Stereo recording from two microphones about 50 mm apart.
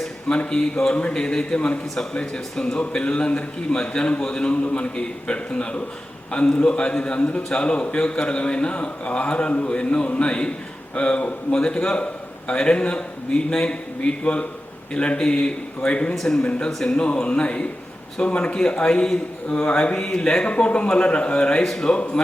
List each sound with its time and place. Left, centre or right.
0.3 s speech: centre
0.9 s a man's voice: left
16.1 s speech: centre
16.4 s a man's voice: centre